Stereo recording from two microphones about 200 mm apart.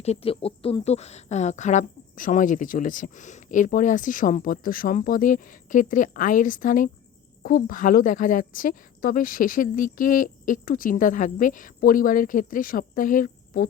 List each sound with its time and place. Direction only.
0.0 s a woman's voice: 30° left (ahead or behind)